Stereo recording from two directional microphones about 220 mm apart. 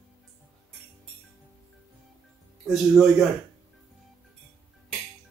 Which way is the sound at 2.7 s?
Centre (ahead or behind).